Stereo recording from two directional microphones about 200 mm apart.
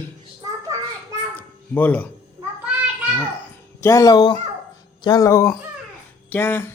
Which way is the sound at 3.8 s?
15° left (ahead or behind).